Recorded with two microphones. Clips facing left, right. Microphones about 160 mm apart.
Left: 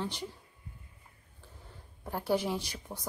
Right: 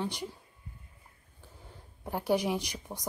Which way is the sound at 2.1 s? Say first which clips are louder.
Right 2 dB; 15° right (ahead or behind).